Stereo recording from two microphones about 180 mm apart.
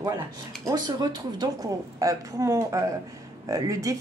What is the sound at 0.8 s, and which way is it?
A woman's voice, 25° right (ahead or behind).